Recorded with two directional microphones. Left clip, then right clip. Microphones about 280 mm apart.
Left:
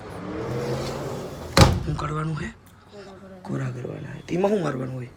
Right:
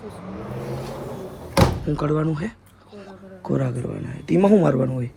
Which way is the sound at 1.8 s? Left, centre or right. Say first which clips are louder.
Right 7 dB; centre.